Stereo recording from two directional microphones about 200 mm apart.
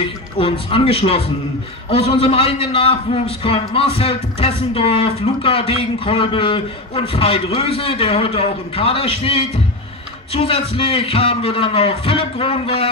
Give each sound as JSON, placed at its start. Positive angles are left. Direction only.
{"t": 0.0, "sound": "a man's voice", "side_deg": 25}